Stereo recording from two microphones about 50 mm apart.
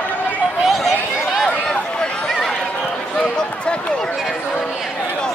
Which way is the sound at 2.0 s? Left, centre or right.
Centre.